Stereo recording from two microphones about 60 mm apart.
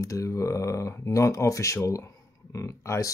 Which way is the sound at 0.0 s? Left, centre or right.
Left.